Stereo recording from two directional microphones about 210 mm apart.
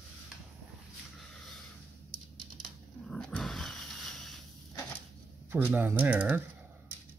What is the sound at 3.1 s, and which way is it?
Roaring cats, 5° left (ahead or behind).